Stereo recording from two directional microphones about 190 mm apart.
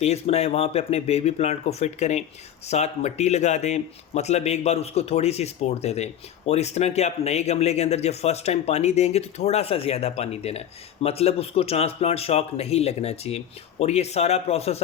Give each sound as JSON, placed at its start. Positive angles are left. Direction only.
{"t": 0.0, "sound": "speech", "side_deg": 35}